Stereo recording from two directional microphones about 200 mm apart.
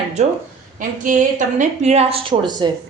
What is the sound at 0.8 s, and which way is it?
A woman's voice, 40° right (ahead or behind).